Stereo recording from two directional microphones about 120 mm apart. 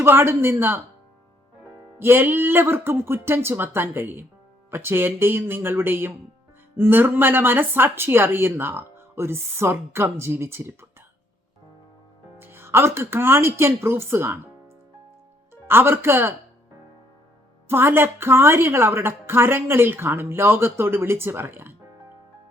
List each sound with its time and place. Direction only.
0.0 s speech: 20° right (ahead or behind)
2.0 s speech: 15° right (ahead or behind)
12.4 s a woman's voice: 20° right (ahead or behind)
15.6 s a woman's voice: 20° right (ahead or behind)
17.7 s a woman's voice: 20° right (ahead or behind)